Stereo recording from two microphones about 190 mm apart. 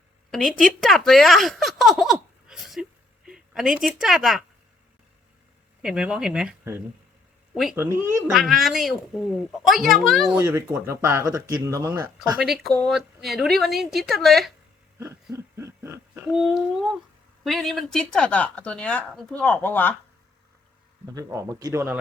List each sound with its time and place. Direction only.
0.3 s a woman's voice: centre (ahead or behind)
5.8 s speech: 5° right (ahead or behind)
7.8 s speech: 15° right (ahead or behind)
8.3 s speech: centre (ahead or behind)
10.4 s speech: 15° right (ahead or behind); by 14.5 s centre (ahead or behind)
14.9 s a sound: 15° right (ahead or behind)
16.3 s speech: centre (ahead or behind)
21.2 s speech: 15° right (ahead or behind)